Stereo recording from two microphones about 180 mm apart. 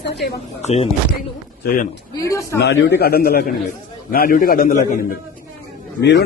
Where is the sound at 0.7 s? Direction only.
35° left (ahead or behind).